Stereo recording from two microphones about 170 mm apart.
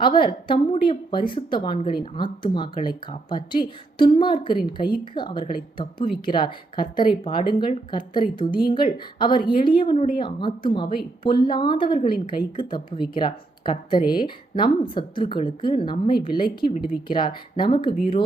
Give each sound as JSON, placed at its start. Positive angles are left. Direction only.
{"t": 0.0, "sound": "a woman's voice", "side_deg": 30}